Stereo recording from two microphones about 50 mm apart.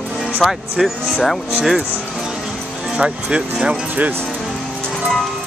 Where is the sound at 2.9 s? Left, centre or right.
Centre.